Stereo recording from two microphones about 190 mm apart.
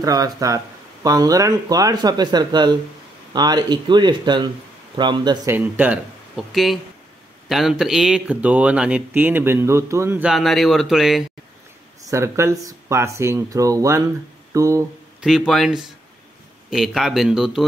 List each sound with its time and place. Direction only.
0.0 s speech: 20° right (ahead or behind); by 11.2 s centre (ahead or behind)
12.0 s speech: 15° right (ahead or behind)
14.5 s a sound: 15° right (ahead or behind)
15.1 s speech: centre (ahead or behind)